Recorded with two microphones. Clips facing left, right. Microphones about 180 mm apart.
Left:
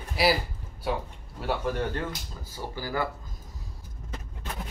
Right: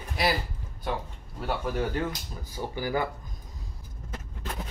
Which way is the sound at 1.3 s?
Centre (ahead or behind).